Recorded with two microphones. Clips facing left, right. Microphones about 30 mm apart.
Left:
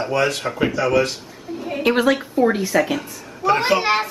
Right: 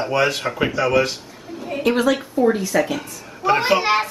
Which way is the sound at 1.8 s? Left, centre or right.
Centre.